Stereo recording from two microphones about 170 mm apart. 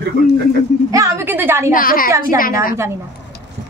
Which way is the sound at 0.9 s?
15° right (ahead or behind).